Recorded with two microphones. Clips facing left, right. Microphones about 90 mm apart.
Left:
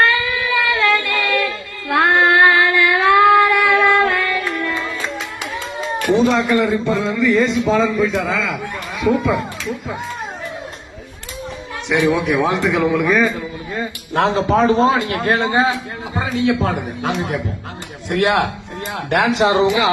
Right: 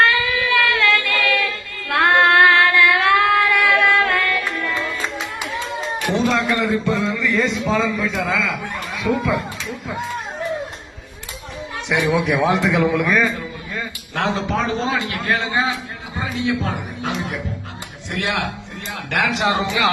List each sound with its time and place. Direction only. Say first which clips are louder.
0.0 s child singing: even; centre (ahead or behind)
1.9 s singing: left 1 dB; 5° left (ahead or behind)
6.2 s a man's voice: left 4 dB; 5° left (ahead or behind)
11.9 s a man's voice: left 2 dB; centre (ahead or behind)
14.1 s a man's voice: left 6 dB; 35° left (ahead or behind)